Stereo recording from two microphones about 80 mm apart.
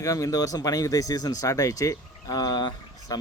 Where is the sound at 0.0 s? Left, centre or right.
Left.